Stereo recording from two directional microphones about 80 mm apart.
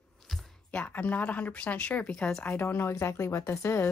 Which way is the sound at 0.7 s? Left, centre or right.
Left.